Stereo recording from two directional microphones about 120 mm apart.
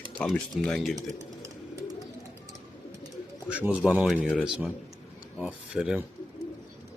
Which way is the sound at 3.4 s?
10° right (ahead or behind).